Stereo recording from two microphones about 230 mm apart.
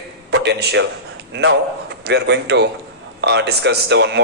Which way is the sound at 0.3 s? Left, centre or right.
Right.